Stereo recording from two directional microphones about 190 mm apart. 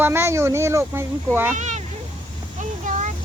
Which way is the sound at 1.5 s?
40° right (ahead or behind).